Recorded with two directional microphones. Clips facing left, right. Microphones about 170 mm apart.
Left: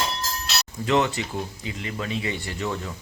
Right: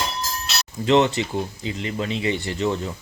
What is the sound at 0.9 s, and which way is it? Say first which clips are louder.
Speech: right 5 dB; 25° right (ahead or behind).